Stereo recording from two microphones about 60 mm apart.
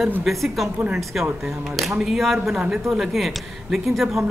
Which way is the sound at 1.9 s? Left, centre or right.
Centre.